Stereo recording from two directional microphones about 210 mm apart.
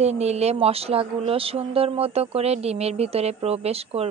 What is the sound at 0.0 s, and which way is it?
Speech, 30° right (ahead or behind).